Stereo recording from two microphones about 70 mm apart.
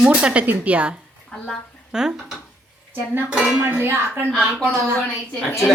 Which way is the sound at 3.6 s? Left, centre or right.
Right.